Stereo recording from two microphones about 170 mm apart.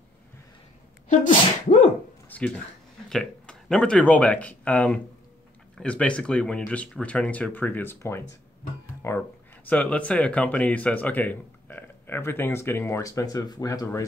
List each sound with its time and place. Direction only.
1.0 s sneeze: 45° left (ahead or behind)
2.2 s a sound: 10° left (ahead or behind)
3.1 s speech: 5° left (ahead or behind); by 14.0 s 20° left (ahead or behind)